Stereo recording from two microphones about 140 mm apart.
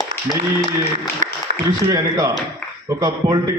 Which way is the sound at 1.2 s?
65° right (ahead or behind).